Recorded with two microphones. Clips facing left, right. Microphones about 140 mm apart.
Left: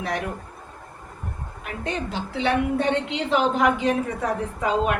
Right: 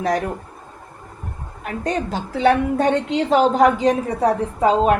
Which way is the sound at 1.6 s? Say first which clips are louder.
Right 6 dB; 40° right (ahead or behind).